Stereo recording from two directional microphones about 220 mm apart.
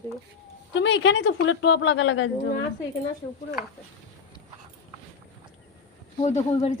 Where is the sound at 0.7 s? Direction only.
55° left (ahead or behind).